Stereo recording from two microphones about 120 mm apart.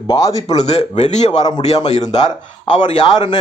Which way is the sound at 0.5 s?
70° left (ahead or behind).